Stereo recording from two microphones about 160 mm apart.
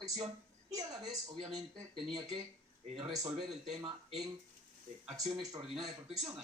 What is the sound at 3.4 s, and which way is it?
Speech, centre (ahead or behind).